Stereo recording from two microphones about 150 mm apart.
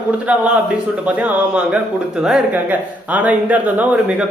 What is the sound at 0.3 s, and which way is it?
A man's voice, 10° right (ahead or behind).